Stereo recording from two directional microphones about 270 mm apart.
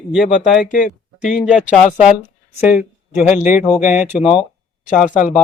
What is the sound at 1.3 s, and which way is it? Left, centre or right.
Speech, centre.